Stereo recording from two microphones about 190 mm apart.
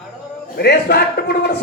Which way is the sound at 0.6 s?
60° left (ahead or behind).